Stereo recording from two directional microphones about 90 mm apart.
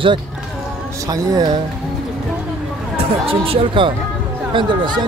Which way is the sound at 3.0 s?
90° right.